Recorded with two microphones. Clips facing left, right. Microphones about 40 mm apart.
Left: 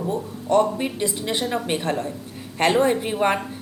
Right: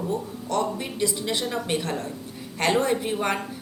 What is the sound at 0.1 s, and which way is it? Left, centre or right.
A woman's voice, left.